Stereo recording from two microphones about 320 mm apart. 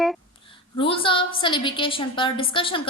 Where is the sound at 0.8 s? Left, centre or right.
Centre.